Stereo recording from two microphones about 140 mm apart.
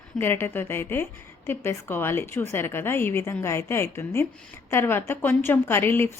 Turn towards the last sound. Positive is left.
turn(degrees=15)  # may be behind; listen again after turning